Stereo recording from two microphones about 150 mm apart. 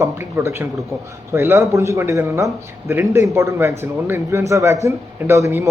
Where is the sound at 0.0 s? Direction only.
15° right (ahead or behind).